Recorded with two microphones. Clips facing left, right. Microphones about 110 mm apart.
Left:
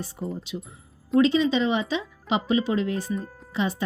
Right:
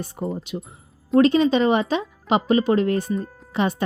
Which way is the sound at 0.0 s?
75° right (ahead or behind).